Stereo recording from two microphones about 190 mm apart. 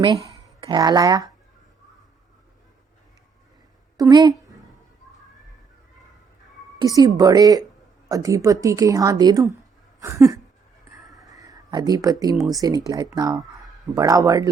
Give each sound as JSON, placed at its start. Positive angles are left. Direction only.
{"t": 0.6, "sound": "speech", "side_deg": -25}
{"t": 3.9, "sound": "a woman's voice", "side_deg": -20}
{"t": 6.7, "sound": "a woman's voice", "side_deg": -20}